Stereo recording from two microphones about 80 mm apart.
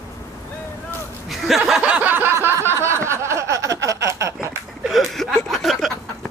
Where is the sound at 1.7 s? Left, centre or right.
Centre; by 4.3 s right.